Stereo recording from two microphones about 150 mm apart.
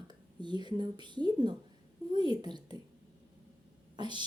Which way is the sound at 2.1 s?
30° right (ahead or behind).